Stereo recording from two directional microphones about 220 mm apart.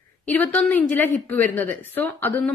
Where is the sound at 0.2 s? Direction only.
5° left (ahead or behind).